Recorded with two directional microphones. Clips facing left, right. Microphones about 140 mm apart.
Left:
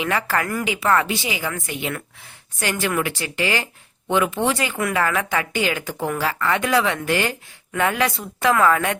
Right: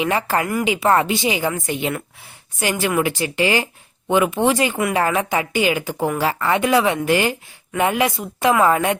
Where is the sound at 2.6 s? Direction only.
15° right (ahead or behind).